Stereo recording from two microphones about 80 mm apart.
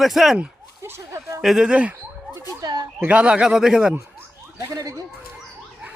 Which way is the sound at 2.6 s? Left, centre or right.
Right.